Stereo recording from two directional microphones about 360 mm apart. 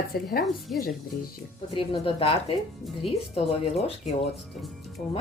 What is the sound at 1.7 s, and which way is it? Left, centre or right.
Speech, centre.